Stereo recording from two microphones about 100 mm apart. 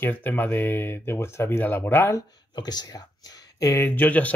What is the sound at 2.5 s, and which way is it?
Speech, 45° left (ahead or behind).